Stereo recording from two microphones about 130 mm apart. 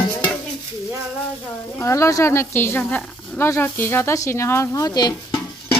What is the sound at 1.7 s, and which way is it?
Speech, 20° left (ahead or behind).